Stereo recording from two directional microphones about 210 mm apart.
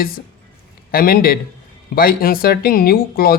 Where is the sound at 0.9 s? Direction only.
45° left (ahead or behind).